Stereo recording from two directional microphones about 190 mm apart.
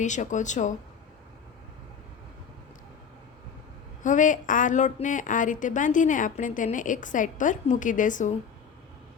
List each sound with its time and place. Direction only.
0.0 s speech: 40° left (ahead or behind)
4.0 s a woman's voice: 40° left (ahead or behind)